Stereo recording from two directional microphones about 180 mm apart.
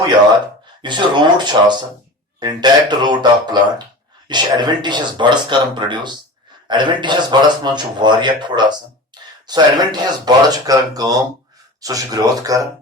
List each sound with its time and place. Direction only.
0.8 s a man's voice: 25° right (ahead or behind)
9.1 s a sound: 25° right (ahead or behind)
9.5 s a man's voice: 25° right (ahead or behind)